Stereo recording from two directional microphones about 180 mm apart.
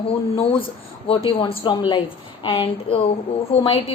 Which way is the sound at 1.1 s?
30° left (ahead or behind).